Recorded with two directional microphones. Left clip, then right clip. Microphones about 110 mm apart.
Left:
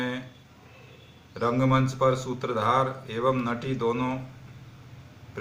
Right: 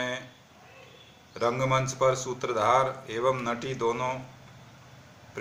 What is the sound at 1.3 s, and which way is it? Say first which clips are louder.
Speech: left 1 dB; 20° right (ahead or behind).